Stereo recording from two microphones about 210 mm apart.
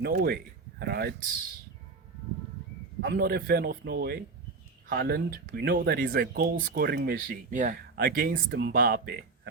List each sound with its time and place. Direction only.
0.0 s speech: 45° right (ahead or behind)
3.0 s speech: 45° right (ahead or behind)